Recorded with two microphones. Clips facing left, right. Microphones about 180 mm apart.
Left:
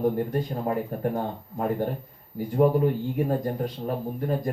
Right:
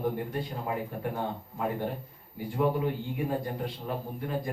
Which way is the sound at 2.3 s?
45° left (ahead or behind).